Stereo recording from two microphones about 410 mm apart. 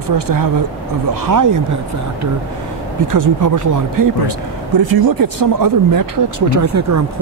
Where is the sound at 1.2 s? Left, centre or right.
Right.